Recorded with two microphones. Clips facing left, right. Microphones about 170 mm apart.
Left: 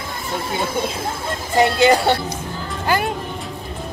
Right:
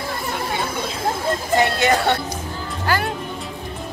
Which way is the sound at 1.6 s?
30° left (ahead or behind).